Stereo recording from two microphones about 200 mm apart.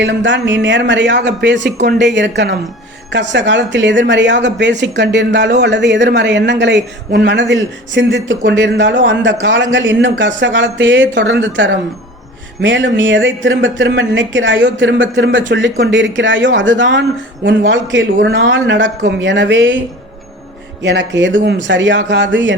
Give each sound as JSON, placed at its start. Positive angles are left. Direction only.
{"t": 0.0, "sound": "speech", "side_deg": -65}
{"t": 20.8, "sound": "speech", "side_deg": -65}